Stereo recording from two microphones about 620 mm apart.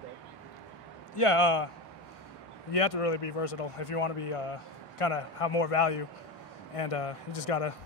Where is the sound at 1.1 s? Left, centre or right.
Left.